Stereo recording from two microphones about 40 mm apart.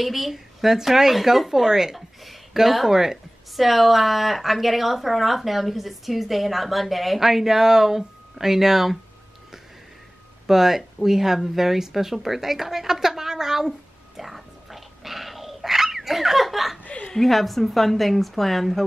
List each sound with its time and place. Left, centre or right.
0.0 s a woman's voice: centre
10.4 s speech: centre
10.8 s a sound: centre
16.8 s chuckle: left
17.1 s a woman's voice: centre